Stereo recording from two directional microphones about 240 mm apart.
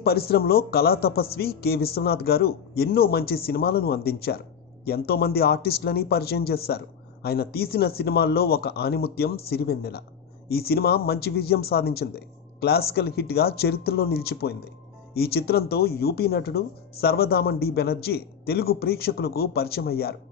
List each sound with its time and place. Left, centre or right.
0.0 s speech: left